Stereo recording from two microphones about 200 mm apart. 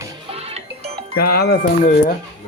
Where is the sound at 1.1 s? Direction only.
50° left (ahead or behind).